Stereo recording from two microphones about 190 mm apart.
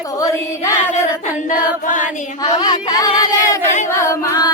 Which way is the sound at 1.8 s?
45° left (ahead or behind).